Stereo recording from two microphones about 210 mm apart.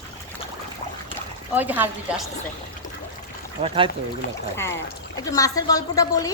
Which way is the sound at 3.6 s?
25° right (ahead or behind).